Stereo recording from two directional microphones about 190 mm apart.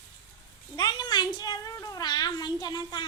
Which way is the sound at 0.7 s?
20° left (ahead or behind).